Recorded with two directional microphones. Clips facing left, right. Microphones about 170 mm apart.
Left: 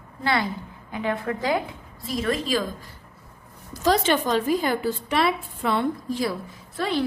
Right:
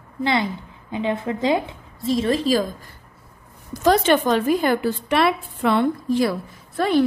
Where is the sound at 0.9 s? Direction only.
25° right (ahead or behind).